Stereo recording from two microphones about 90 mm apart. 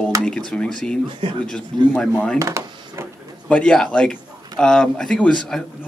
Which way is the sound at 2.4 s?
35° right (ahead or behind).